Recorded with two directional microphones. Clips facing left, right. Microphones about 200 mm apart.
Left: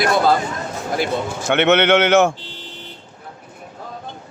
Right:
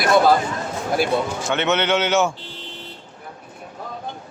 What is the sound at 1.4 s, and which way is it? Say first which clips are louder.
Speech: left 8 dB; 55° left (ahead or behind).